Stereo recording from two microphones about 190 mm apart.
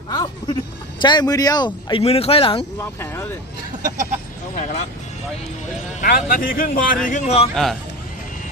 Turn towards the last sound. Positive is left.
turn(degrees=0)  # may be behind; listen again after turning